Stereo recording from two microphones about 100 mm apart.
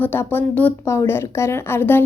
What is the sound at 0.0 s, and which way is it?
A woman's voice, 20° left (ahead or behind).